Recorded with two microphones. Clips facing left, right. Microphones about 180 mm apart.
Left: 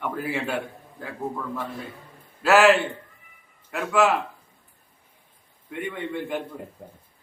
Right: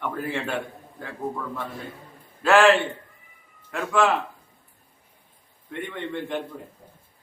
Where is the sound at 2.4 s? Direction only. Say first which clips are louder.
Even; 5° left (ahead or behind).